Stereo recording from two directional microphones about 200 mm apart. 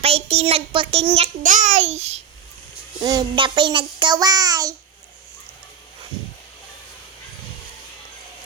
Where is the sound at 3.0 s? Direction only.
20° right (ahead or behind).